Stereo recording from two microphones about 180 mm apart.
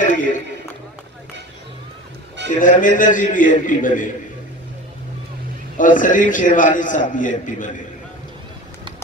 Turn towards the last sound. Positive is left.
turn(degrees=45)  # may be behind; listen again after turning